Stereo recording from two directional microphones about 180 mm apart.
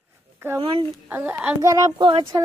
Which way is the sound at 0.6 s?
30° right (ahead or behind).